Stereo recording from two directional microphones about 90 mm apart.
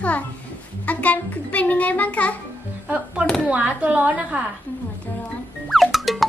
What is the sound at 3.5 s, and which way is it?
Speech, 15° right (ahead or behind).